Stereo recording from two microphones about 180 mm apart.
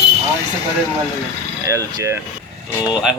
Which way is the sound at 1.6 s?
15° right (ahead or behind).